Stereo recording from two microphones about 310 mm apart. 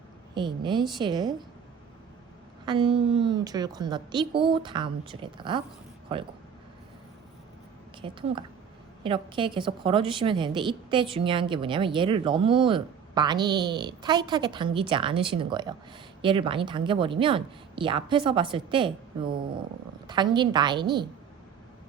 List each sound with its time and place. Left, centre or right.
0.3 s a woman's voice: centre
2.6 s a woman's voice: centre
8.0 s a woman's voice: centre